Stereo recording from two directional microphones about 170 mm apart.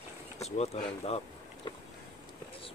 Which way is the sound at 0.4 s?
40° left (ahead or behind).